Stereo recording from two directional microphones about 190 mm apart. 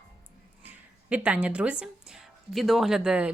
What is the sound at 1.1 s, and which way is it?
Speech, 5° right (ahead or behind).